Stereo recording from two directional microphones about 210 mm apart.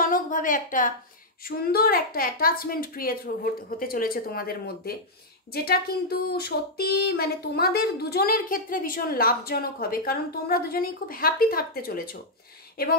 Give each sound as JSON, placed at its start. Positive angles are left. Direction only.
{"t": 0.0, "sound": "a woman's voice", "side_deg": 40}